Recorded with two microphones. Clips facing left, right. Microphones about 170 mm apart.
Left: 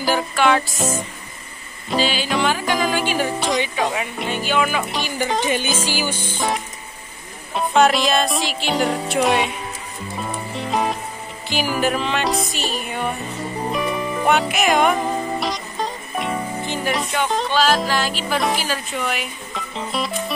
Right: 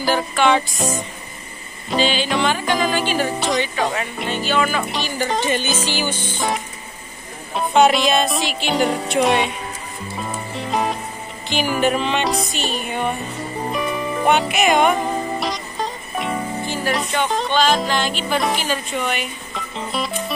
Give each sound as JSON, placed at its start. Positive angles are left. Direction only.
{"t": 0.0, "sound": "speech", "side_deg": 5}
{"t": 1.9, "sound": "speech", "side_deg": 5}
{"t": 10.1, "sound": "music", "side_deg": 0}
{"t": 16.6, "sound": "music", "side_deg": 20}
{"t": 16.9, "sound": "speech", "side_deg": 5}